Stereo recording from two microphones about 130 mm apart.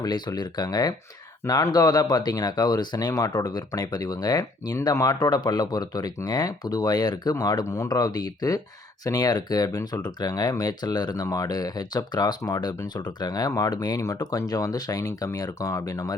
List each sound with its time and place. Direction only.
0.0 s speech: 30° left (ahead or behind)